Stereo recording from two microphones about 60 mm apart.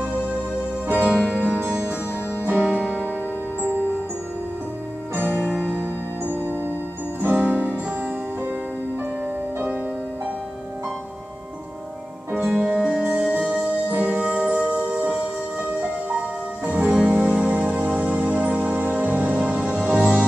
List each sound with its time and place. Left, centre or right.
0.8 s music: right
5.1 s music: right
6.4 s music: left
7.2 s music: right
12.3 s music: centre